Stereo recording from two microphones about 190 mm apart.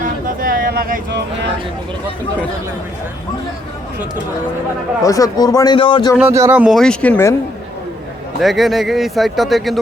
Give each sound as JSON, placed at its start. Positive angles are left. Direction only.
{"t": 0.0, "sound": "a sound", "side_deg": -45}
{"t": 5.0, "sound": "a man's voice", "side_deg": 20}
{"t": 6.1, "sound": "speech", "side_deg": -10}
{"t": 8.4, "sound": "speech", "side_deg": 0}